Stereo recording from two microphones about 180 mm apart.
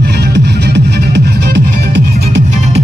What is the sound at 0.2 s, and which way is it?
Music, 70° right (ahead or behind).